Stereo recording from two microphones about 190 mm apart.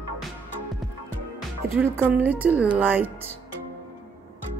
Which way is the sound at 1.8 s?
10° right (ahead or behind).